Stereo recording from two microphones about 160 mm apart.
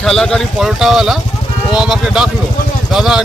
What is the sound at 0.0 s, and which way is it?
Speech, 5° left (ahead or behind).